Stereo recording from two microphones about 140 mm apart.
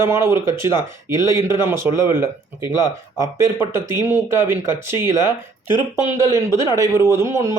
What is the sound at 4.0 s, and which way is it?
Speech, 15° right (ahead or behind).